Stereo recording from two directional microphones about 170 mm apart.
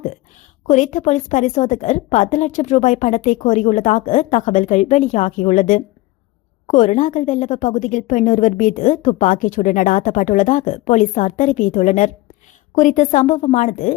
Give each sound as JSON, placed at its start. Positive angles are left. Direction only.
{"t": 0.7, "sound": "a woman's voice", "side_deg": 45}